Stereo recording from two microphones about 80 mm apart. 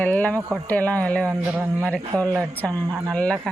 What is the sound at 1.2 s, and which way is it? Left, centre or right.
Speech, right.